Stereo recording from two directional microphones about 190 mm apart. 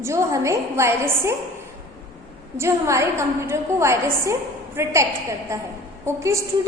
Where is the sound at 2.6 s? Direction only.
15° right (ahead or behind).